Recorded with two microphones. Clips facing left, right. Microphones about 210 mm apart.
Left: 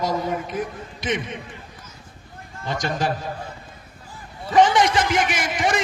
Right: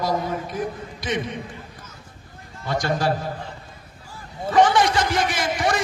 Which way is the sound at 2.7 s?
20° left (ahead or behind).